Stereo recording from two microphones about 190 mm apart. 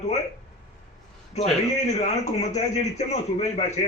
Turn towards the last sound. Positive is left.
turn(degrees=35)  # may be behind; listen again after turning